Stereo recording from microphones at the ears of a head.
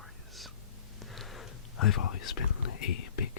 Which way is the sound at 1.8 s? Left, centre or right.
Left.